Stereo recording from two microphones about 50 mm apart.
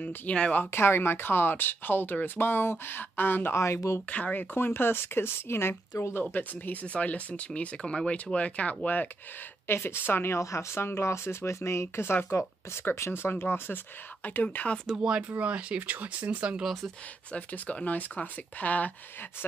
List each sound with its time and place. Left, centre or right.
0.3 s speech: left
0.7 s speech: left
3.5 s speech: left
4.1 s speech: left
6.3 s speech: left
9.7 s speech: left
10.3 s speech: left
10.8 s speech: left
14.2 s speech: left
15.0 s speech: right
17.3 s speech: left